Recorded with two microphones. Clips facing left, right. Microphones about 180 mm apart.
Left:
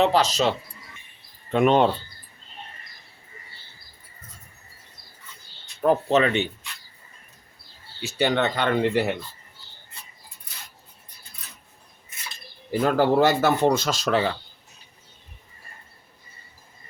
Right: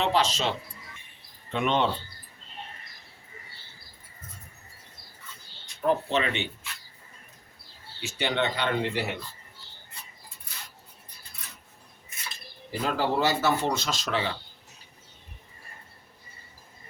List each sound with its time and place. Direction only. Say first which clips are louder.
0.0 s speech: left 5 dB; 40° left (ahead or behind)
1.5 s speech: left 7 dB; 45° left (ahead or behind)
5.8 s speech: left 6 dB; 40° left (ahead or behind)
8.0 s speech: left 5 dB; 40° left (ahead or behind)
12.8 s speech: left 7 dB; 50° left (ahead or behind)